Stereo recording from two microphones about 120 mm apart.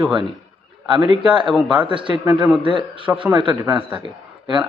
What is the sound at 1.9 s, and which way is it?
Speech, 45° right (ahead or behind).